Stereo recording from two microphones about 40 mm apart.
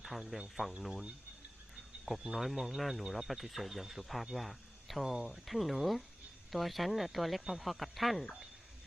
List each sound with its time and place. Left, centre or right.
0.0 s speech: centre
2.1 s speech: centre
2.4 s speech: centre